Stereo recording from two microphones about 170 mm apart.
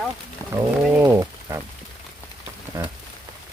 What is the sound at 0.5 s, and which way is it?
Speech, 15° right (ahead or behind).